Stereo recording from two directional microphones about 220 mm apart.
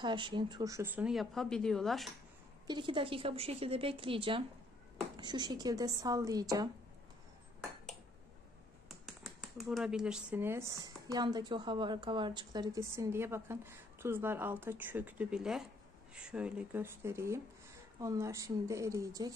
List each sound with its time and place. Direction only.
0.0 s speech: 20° right (ahead or behind); by 2.0 s centre (ahead or behind)
2.6 s speech: 20° right (ahead or behind)
8.8 s speech: centre (ahead or behind)